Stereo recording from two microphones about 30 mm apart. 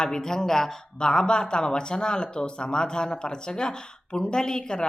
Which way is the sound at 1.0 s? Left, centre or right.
Left.